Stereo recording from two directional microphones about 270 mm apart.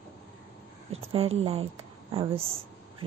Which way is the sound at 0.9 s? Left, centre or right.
Right.